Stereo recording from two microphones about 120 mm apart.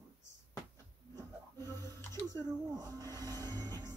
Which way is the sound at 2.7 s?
35° right (ahead or behind).